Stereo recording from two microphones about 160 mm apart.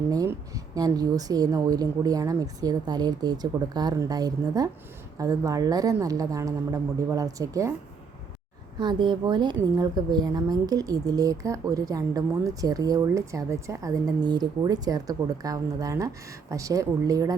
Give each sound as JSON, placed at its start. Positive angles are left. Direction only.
{"t": 0.1, "sound": "a woman's voice", "side_deg": -20}
{"t": 8.8, "sound": "a woman's voice", "side_deg": -30}